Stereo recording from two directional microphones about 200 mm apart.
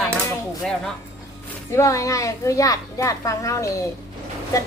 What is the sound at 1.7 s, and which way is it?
A woman's voice, 15° left (ahead or behind).